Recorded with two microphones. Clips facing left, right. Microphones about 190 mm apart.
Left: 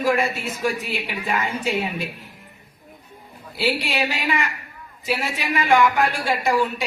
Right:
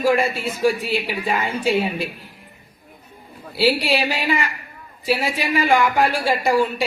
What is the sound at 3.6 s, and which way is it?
Speech, 30° right (ahead or behind).